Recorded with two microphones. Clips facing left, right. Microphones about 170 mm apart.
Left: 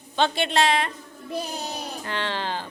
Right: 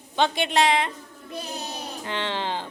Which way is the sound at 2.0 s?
20° right (ahead or behind).